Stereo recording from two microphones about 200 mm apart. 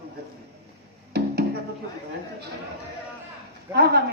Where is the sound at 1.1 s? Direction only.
55° right (ahead or behind).